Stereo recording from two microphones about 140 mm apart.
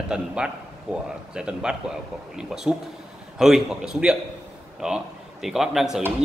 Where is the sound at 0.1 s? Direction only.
5° right (ahead or behind).